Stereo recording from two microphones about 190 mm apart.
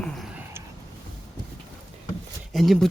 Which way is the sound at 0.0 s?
Centre (ahead or behind).